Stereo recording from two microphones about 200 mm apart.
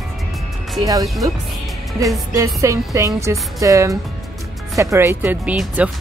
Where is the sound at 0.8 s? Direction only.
15° right (ahead or behind).